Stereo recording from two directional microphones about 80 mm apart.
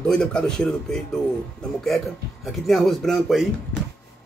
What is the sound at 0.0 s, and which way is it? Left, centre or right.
Speech, centre.